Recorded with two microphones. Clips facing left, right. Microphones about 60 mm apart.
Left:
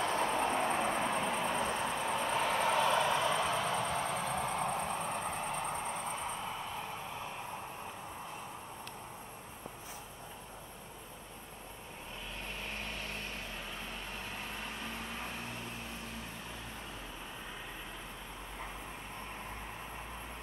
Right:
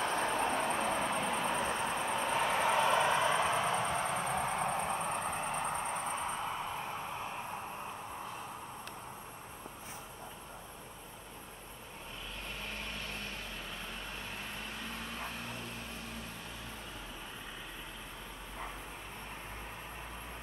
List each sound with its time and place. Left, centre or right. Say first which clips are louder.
0.1 s vehicle: left 1 dB; left
1.2 s vehicle: even; centre
1.7 s vehicle: even; centre
2.2 s vehicle: right 1 dB; centre